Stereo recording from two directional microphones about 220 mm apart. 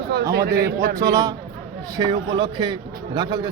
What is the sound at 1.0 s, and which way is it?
A man's voice, 15° right (ahead or behind).